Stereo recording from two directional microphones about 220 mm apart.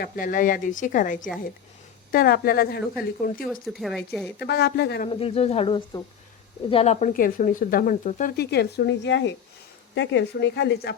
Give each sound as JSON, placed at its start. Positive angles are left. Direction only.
{"t": 0.0, "sound": "speech", "side_deg": 40}
{"t": 3.4, "sound": "speech", "side_deg": 0}
{"t": 4.4, "sound": "speech", "side_deg": 50}
{"t": 5.0, "sound": "speech", "side_deg": 25}